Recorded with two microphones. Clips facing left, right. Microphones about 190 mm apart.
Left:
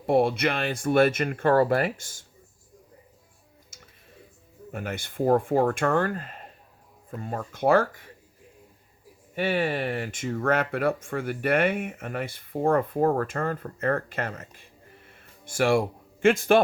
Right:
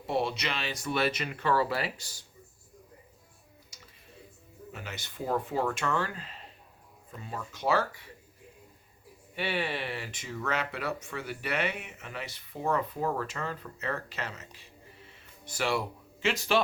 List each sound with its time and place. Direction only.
0.0 s speech: 55° left (ahead or behind)
4.7 s speech: 50° left (ahead or behind)
9.3 s speech: 45° left (ahead or behind)